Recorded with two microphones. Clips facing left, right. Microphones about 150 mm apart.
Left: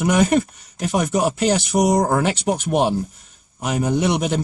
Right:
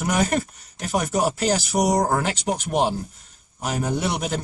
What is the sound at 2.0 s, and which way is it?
Speech, 10° left (ahead or behind).